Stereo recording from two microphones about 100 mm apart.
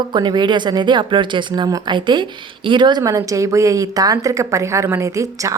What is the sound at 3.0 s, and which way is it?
A woman's voice, 35° right (ahead or behind).